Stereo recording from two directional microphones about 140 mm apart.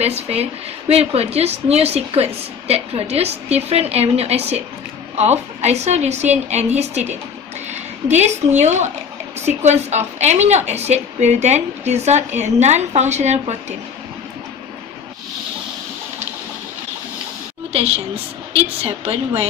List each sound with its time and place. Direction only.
0.0 s a woman's voice: 50° right (ahead or behind)
17.7 s speech: 45° right (ahead or behind)